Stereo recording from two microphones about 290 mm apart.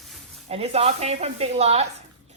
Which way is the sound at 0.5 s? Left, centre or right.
Right.